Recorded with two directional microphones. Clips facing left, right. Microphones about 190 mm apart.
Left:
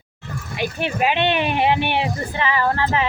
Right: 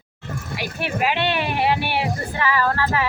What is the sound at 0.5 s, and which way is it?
Speech, 20° left (ahead or behind).